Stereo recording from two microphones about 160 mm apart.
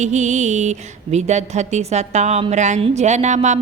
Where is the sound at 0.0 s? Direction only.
45° right (ahead or behind).